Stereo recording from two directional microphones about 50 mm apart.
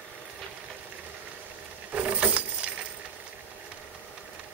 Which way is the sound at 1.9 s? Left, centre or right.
Right.